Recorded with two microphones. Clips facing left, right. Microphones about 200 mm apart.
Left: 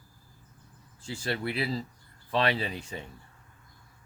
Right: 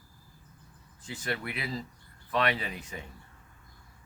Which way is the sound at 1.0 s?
30° left (ahead or behind).